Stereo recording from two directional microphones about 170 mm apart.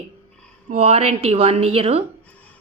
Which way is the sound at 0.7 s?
40° right (ahead or behind).